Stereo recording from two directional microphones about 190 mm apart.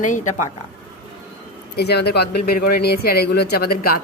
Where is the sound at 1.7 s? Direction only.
60° left (ahead or behind).